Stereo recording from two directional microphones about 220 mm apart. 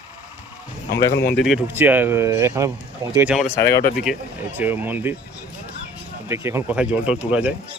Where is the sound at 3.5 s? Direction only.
10° left (ahead or behind).